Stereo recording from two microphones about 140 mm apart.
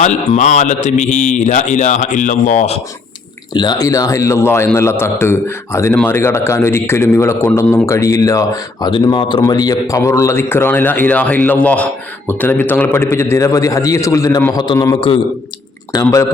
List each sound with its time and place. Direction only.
0.0 s speech: 55° left (ahead or behind)
3.5 s a man's voice: 30° left (ahead or behind)
8.9 s a man's voice: 35° left (ahead or behind)